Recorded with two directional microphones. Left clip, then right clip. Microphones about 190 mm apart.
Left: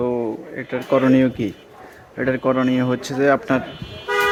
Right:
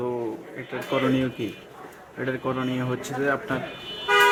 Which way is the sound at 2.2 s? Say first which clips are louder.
Left 9 dB; 50° left (ahead or behind).